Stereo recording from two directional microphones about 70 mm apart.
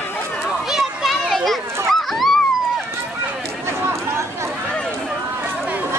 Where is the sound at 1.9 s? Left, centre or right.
Centre.